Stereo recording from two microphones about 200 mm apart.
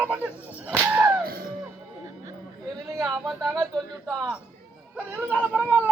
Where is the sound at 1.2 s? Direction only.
50° right (ahead or behind).